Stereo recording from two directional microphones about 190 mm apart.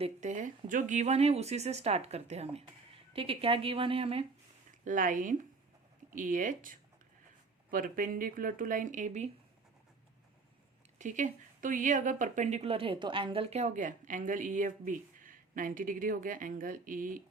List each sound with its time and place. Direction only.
0.0 s a woman's voice: 40° right (ahead or behind)
4.9 s a woman's voice: 45° right (ahead or behind)
10.9 s a woman's voice: 40° right (ahead or behind)